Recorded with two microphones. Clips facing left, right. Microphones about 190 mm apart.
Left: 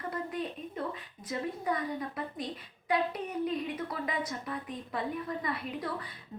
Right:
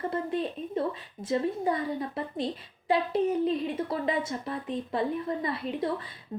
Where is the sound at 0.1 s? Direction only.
25° right (ahead or behind).